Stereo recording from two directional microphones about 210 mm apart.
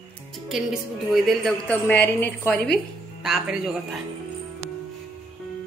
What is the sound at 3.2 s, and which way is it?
Speech, 5° right (ahead or behind).